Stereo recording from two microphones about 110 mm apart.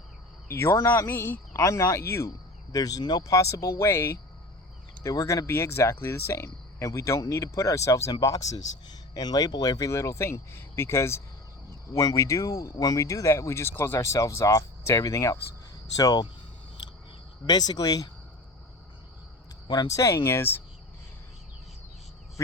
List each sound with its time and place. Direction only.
0.4 s speech: 25° left (ahead or behind)
17.4 s speech: 40° left (ahead or behind)
19.6 s speech: 40° left (ahead or behind)